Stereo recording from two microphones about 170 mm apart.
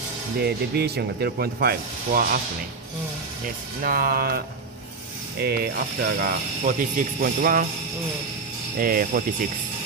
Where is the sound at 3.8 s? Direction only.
60° right (ahead or behind).